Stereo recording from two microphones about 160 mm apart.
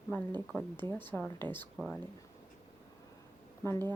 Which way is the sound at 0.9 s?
10° left (ahead or behind).